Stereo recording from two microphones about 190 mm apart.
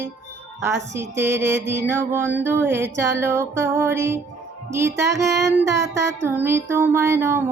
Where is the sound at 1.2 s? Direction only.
15° right (ahead or behind).